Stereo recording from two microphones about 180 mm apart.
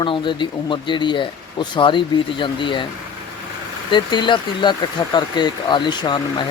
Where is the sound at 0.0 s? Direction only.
25° left (ahead or behind).